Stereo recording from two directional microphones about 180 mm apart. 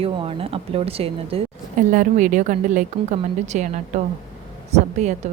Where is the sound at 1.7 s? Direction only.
45° right (ahead or behind).